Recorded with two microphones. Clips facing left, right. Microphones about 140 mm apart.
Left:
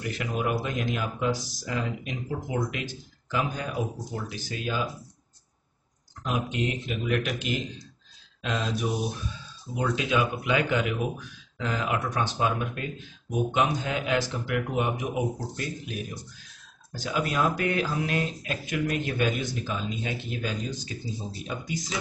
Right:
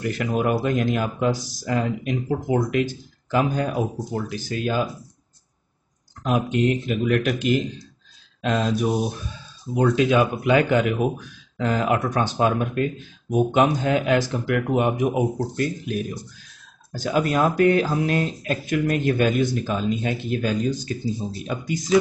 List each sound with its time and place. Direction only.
0.1 s speech: 50° right (ahead or behind)
6.2 s speech: 45° right (ahead or behind)
21.5 s speech: 65° right (ahead or behind)